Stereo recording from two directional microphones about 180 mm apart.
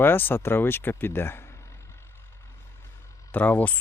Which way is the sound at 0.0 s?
10° left (ahead or behind).